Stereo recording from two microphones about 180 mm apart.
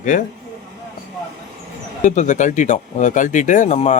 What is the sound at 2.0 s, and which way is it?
Speech, 40° left (ahead or behind).